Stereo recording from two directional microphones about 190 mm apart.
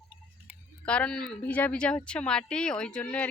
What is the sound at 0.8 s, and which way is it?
Speech, 5° left (ahead or behind).